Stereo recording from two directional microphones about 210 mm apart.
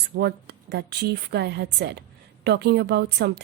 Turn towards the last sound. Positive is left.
turn(degrees=-50)  # may be behind; listen again after turning